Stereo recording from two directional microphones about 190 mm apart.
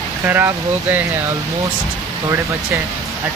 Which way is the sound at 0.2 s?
10° right (ahead or behind).